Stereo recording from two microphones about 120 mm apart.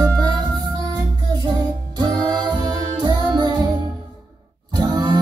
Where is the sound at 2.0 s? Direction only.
40° right (ahead or behind).